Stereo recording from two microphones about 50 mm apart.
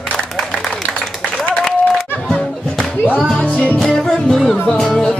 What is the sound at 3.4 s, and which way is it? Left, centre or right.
Music, left.